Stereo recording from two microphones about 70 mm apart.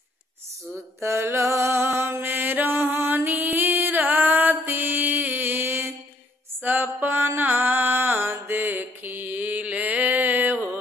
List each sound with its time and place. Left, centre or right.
1.0 s music: right
6.6 s mantra: right